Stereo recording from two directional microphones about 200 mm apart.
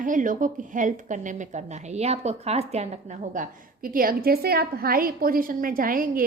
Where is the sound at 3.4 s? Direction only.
45° right (ahead or behind).